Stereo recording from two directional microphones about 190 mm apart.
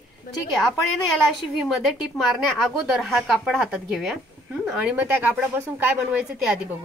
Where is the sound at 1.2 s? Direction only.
Centre (ahead or behind).